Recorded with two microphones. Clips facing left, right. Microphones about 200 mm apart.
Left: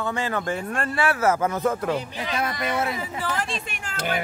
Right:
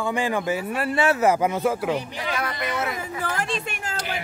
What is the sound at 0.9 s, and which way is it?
A man's voice, 20° right (ahead or behind).